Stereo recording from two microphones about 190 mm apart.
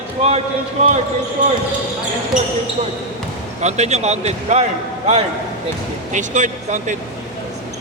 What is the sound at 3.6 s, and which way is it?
A man's voice, 35° right (ahead or behind).